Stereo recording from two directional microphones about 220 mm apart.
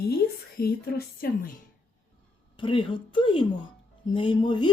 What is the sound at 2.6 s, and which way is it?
Speech, 25° left (ahead or behind).